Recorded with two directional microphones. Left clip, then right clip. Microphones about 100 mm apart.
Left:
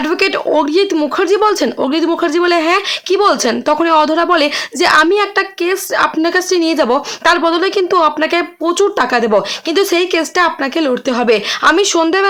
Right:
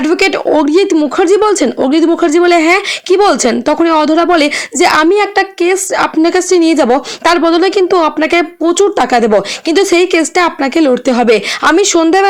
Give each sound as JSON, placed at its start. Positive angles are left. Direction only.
{"t": 0.0, "sound": "a woman's voice", "side_deg": -30}